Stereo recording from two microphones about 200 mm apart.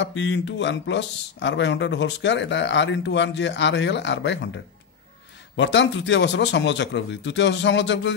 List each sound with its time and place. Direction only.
0.0 s speech: 65° left (ahead or behind)
5.6 s speech: 65° left (ahead or behind)